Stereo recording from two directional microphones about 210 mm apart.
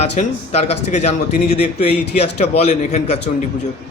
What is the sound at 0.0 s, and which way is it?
Speech, 30° left (ahead or behind).